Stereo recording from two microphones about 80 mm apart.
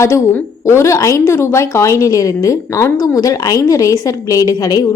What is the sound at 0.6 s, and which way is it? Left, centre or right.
A woman's voice, left.